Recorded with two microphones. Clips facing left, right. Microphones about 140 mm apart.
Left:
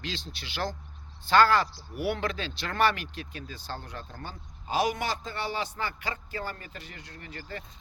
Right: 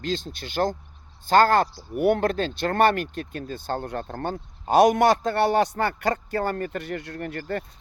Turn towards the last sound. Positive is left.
turn(degrees=-55)  # may be behind; listen again after turning